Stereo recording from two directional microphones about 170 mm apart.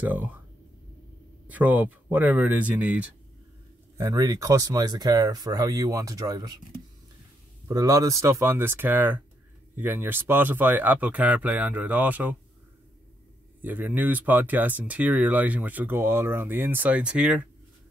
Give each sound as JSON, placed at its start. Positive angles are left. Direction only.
{"t": 0.0, "sound": "speech", "side_deg": -10}
{"t": 1.5, "sound": "speech", "side_deg": -10}
{"t": 4.0, "sound": "speech", "side_deg": -20}
{"t": 7.6, "sound": "speech", "side_deg": -20}
{"t": 13.6, "sound": "speech", "side_deg": -10}